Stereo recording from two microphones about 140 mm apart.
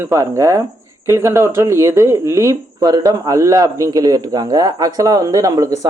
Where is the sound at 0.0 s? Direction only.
20° right (ahead or behind).